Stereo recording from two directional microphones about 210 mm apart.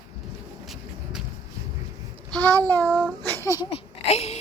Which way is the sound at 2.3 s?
5° left (ahead or behind).